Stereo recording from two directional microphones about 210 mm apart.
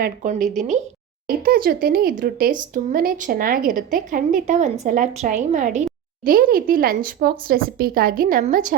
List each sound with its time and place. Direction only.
0.0 s a woman's voice: 40° right (ahead or behind)